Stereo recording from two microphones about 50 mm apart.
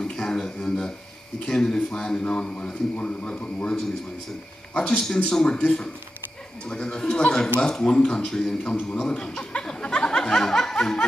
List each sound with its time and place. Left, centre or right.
0.0 s a man's voice: centre
4.7 s a man's voice: centre
9.4 s a sound: centre